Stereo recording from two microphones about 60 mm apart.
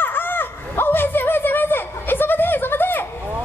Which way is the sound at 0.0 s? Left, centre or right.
Left.